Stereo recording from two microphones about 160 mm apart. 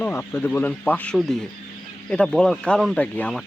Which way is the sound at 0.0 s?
10° left (ahead or behind).